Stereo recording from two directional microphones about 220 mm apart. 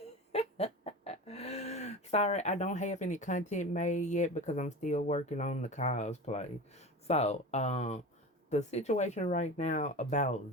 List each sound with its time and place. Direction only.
0.3 s speech: 30° left (ahead or behind)